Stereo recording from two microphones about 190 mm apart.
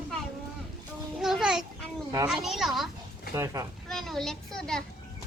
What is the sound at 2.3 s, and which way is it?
Speech, centre (ahead or behind).